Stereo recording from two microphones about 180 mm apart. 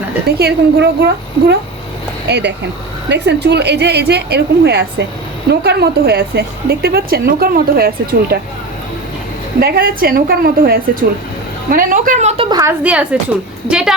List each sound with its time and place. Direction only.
0.3 s a woman's voice: 65° right (ahead or behind)
9.6 s a woman's voice: 55° right (ahead or behind)
12.4 s a woman's voice: 20° right (ahead or behind)
12.8 s a woman's voice: 5° right (ahead or behind)